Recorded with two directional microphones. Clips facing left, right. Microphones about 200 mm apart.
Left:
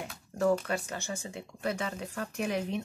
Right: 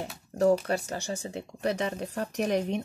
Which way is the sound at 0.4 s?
35° right (ahead or behind).